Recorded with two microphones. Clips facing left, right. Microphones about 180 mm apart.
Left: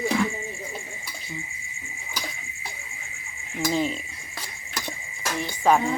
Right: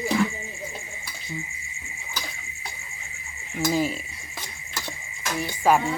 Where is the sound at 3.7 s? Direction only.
5° right (ahead or behind).